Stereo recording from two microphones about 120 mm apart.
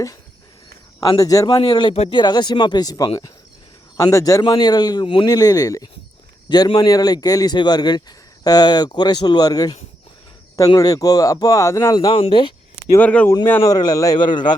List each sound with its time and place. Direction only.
1.2 s a man's voice: 30° left (ahead or behind)
1.9 s speech: 60° left (ahead or behind)
2.1 s a man's voice: 35° left (ahead or behind)
5.3 s a man's voice: 30° left (ahead or behind)
12.1 s speech: 45° left (ahead or behind)
13.0 s speech: 10° left (ahead or behind)
13.7 s a man's voice: 30° left (ahead or behind)